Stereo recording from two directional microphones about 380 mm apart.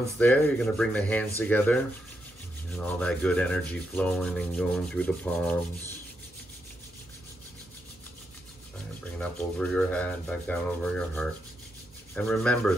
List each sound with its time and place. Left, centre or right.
0.2 s rub: centre
9.2 s rub: centre